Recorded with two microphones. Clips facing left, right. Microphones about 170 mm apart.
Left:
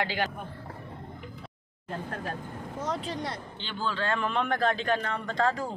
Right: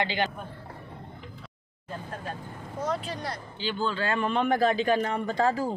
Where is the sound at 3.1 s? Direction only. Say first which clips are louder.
Left 1 dB; 20° left (ahead or behind).